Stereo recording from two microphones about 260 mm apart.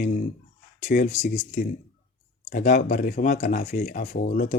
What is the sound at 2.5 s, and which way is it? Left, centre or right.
Speech, left.